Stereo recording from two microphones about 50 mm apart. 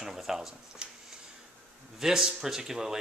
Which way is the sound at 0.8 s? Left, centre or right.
Centre.